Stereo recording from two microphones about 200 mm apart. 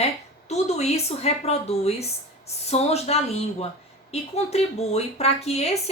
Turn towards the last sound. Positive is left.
turn(degrees=30)  # may be behind; listen again after turning